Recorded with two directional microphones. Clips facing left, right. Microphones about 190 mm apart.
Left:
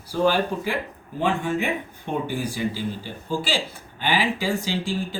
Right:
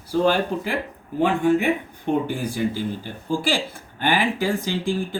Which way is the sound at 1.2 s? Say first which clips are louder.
Right 5 dB; 55° right (ahead or behind).